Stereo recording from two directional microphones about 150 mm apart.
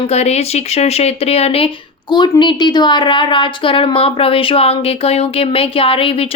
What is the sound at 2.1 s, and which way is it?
Speech, 30° left (ahead or behind).